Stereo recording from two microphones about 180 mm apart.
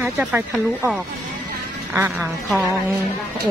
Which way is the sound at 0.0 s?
10° right (ahead or behind).